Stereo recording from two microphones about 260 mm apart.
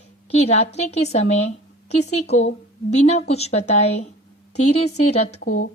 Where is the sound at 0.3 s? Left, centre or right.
Left.